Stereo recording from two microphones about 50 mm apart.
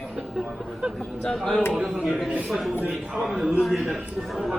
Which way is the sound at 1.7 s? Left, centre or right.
Centre.